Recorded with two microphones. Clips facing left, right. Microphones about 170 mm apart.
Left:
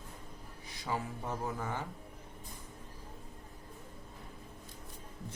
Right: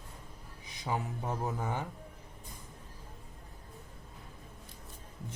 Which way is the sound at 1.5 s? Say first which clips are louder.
Right 2 dB; 15° right (ahead or behind).